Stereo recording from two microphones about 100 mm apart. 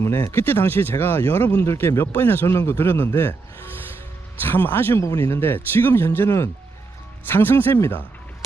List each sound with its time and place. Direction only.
0.0 s speech: 25° left (ahead or behind)
4.4 s speech: 20° left (ahead or behind)